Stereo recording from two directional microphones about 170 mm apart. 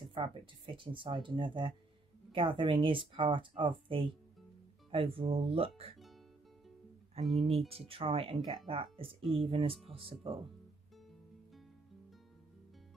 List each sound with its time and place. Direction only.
0.0 s speech: 30° right (ahead or behind)
7.4 s speech: 35° right (ahead or behind)
9.2 s speech: centre (ahead or behind)
9.5 s speech: 35° right (ahead or behind)